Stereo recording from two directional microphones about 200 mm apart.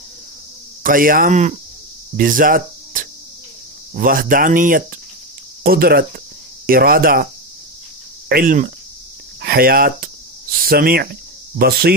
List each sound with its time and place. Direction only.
0.8 s speech: 45° right (ahead or behind)
8.3 s speech: 45° right (ahead or behind)